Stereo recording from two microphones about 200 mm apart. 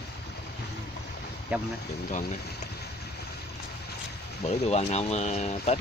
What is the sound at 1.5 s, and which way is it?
Speech, 5° right (ahead or behind).